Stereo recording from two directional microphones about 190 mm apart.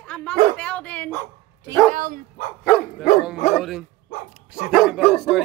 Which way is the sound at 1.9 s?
45° right (ahead or behind).